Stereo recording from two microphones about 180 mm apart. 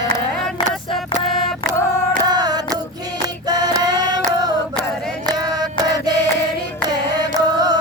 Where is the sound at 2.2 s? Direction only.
20° right (ahead or behind).